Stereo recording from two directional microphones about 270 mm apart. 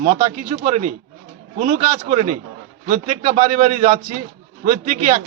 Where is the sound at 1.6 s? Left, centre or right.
Right.